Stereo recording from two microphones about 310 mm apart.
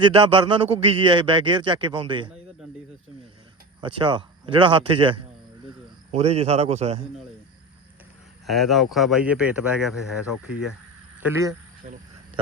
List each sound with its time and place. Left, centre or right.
0.0 s a man's voice: centre
3.8 s a man's voice: centre
8.4 s speech: centre
11.2 s a man's voice: centre